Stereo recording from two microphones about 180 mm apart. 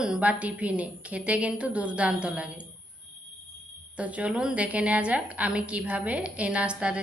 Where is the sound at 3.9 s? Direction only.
5° right (ahead or behind).